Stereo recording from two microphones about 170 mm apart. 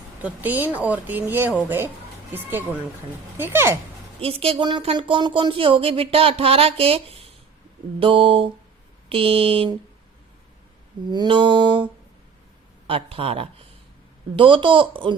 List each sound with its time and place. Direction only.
0.2 s speech: 10° right (ahead or behind)
4.2 s speech: 35° right (ahead or behind)
11.1 s a sound: 25° right (ahead or behind)
12.9 s speech: 35° right (ahead or behind)